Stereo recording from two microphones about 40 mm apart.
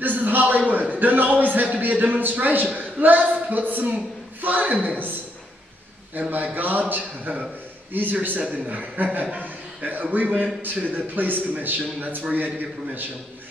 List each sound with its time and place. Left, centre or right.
0.0 s a sound: right
0.7 s a man's voice: right
6.3 s a man's voice: right
9.4 s chuckle: right
10.6 s a man's voice: right